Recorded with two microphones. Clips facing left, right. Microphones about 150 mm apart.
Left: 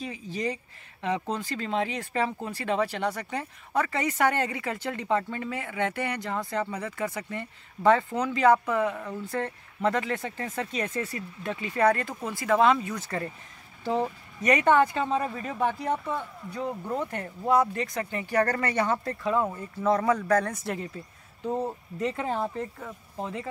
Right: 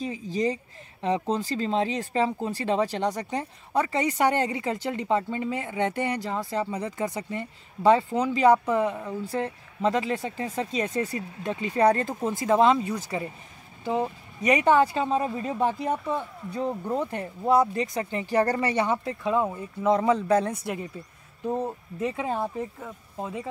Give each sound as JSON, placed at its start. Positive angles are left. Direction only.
{"t": 0.3, "sound": "speech", "side_deg": -35}
{"t": 12.9, "sound": "speech", "side_deg": -10}